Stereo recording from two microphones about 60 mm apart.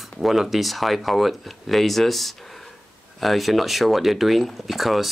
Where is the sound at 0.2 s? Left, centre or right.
Centre.